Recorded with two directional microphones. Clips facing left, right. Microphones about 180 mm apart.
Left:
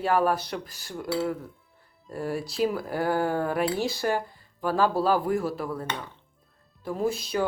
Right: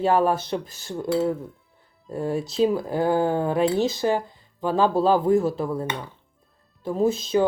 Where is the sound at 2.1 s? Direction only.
20° right (ahead or behind).